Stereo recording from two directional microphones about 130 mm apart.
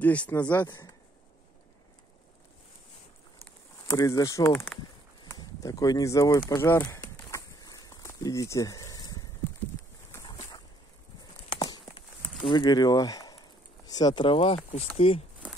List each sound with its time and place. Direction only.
0.0 s speech: 10° left (ahead or behind)
0.7 s speech: 30° left (ahead or behind)
3.8 s speech: 25° left (ahead or behind)
6.5 s a sound: 15° left (ahead or behind)
12.4 s speech: 40° left (ahead or behind)
15.4 s horse: 10° right (ahead or behind)